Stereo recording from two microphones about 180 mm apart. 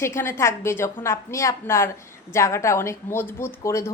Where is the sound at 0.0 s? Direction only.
15° left (ahead or behind).